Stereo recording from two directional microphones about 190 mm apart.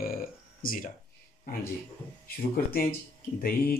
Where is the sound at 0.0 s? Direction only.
50° left (ahead or behind).